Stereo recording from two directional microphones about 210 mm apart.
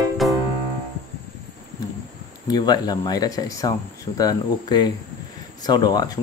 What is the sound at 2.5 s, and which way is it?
Speech, 20° left (ahead or behind).